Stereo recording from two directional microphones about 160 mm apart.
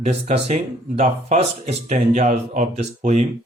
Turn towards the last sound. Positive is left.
turn(degrees=-50)  # may be behind; listen again after turning